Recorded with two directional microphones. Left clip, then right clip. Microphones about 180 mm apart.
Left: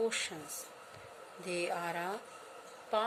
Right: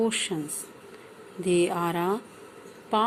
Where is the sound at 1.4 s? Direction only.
20° right (ahead or behind).